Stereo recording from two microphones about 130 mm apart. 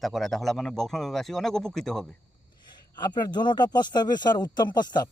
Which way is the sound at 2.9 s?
35° left (ahead or behind).